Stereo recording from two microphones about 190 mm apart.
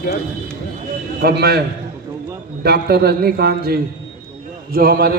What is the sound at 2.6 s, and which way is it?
A man's voice, 55° right (ahead or behind).